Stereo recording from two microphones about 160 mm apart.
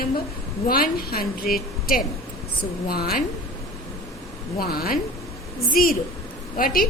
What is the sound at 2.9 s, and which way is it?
Speech, 70° left (ahead or behind).